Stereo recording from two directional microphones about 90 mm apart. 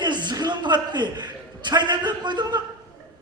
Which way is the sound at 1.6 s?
55° right (ahead or behind).